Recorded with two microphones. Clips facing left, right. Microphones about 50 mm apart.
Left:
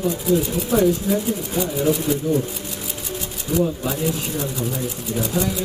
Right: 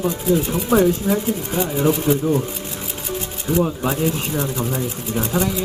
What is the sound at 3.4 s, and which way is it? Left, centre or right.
Speech, right.